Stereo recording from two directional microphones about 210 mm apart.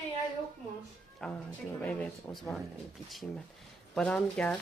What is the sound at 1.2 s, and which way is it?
Speech, 5° left (ahead or behind).